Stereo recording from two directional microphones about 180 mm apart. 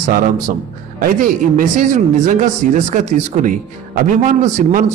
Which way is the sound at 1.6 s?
45° right (ahead or behind).